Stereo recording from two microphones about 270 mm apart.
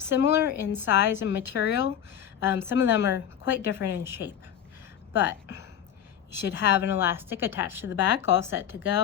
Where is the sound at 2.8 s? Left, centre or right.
Left.